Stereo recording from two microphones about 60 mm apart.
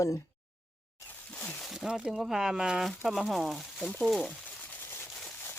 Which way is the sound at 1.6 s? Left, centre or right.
Centre.